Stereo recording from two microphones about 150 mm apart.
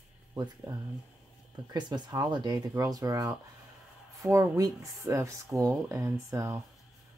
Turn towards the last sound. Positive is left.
turn(degrees=-20)  # may be behind; listen again after turning